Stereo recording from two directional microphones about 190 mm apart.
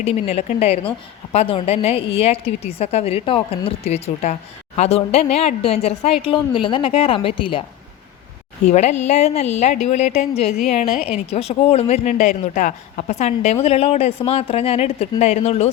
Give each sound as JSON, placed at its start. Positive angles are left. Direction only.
{"t": 0.0, "sound": "a woman's voice", "side_deg": 35}
{"t": 8.6, "sound": "speech", "side_deg": 40}